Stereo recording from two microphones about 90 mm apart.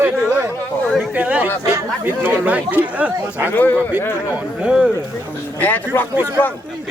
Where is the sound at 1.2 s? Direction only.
15° right (ahead or behind).